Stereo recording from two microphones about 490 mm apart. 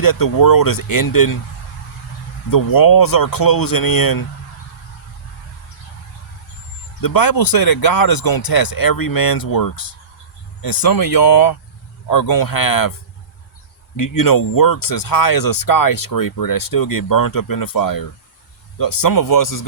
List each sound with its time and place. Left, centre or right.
0.0 s speech: left
2.5 s speech: left
7.0 s speech: left
13.9 s speech: left